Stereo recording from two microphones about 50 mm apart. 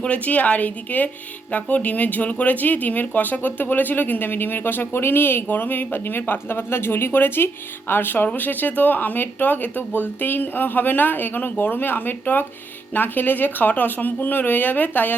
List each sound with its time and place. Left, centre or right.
0.0 s speech: left